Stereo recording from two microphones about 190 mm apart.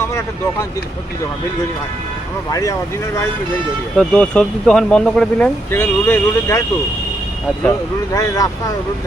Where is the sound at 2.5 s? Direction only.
15° left (ahead or behind).